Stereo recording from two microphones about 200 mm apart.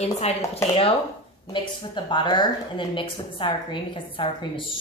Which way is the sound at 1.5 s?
25° left (ahead or behind).